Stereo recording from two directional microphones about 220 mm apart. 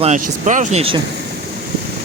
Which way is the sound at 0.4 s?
35° right (ahead or behind).